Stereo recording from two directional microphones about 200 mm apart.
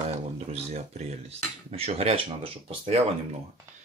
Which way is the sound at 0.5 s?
30° right (ahead or behind).